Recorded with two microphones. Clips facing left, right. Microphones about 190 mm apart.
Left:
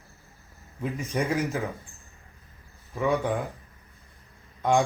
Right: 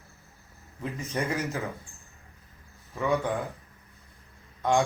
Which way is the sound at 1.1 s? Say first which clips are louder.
Left 3 dB; 15° left (ahead or behind).